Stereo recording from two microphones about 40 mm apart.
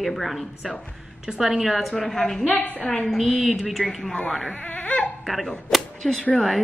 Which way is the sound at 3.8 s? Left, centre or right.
Centre.